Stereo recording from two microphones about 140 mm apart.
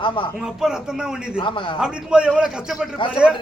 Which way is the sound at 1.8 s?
5° right (ahead or behind).